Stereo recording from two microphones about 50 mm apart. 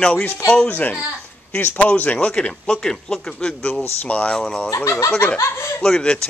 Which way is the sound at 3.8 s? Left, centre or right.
Left.